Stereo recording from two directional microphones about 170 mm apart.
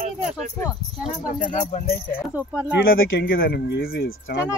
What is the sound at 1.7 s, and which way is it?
Speech, 60° left (ahead or behind).